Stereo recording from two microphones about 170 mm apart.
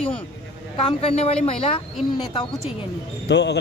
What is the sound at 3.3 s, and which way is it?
Speech, 85° left.